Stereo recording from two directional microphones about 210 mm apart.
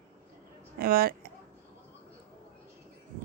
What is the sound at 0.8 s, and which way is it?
Speech, 45° right (ahead or behind).